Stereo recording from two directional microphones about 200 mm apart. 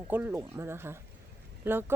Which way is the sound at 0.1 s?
10° right (ahead or behind).